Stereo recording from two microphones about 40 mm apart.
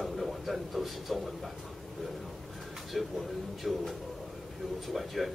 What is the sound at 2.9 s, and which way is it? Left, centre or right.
Speech, centre.